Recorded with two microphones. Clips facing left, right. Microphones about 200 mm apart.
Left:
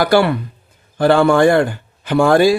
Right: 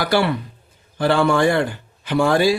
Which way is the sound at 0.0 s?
50° left (ahead or behind).